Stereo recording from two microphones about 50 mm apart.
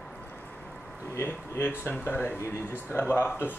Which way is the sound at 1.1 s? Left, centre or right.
Left.